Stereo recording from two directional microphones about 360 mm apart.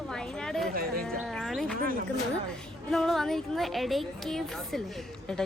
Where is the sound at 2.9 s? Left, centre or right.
Centre.